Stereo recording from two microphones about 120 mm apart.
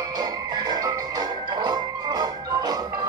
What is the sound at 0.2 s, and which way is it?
Music, 30° right (ahead or behind).